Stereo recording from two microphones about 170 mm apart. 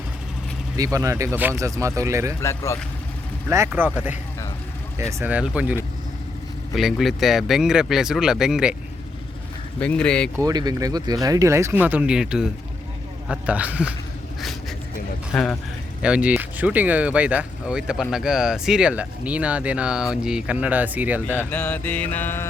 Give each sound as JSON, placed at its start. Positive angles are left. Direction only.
{"t": 0.8, "sound": "speech", "side_deg": -20}
{"t": 2.4, "sound": "mantra", "side_deg": 15}
{"t": 3.8, "sound": "speech", "side_deg": -10}
{"t": 5.2, "sound": "speech", "side_deg": -5}
{"t": 6.7, "sound": "speech", "side_deg": 0}
{"t": 9.8, "sound": "speech", "side_deg": 5}
{"t": 10.4, "sound": "speech", "side_deg": -25}
{"t": 15.3, "sound": "speech", "side_deg": 5}
{"t": 21.5, "sound": "mantra", "side_deg": 10}